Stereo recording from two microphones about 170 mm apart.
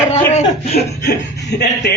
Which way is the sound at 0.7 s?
75° left (ahead or behind).